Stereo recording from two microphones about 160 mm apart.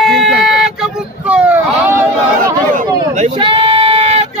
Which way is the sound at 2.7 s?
50° right (ahead or behind).